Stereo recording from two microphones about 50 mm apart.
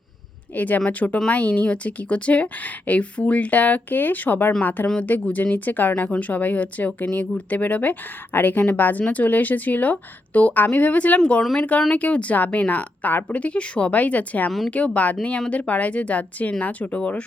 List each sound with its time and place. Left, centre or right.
0.5 s a woman's voice: left